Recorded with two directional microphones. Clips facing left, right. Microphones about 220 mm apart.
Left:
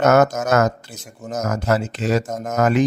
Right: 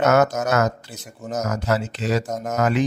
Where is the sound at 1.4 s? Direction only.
50° left (ahead or behind).